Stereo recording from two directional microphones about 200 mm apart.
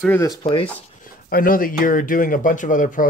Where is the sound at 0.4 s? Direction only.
25° left (ahead or behind).